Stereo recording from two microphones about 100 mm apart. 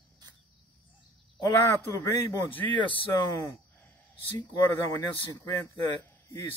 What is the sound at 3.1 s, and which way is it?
Speech, 40° left (ahead or behind).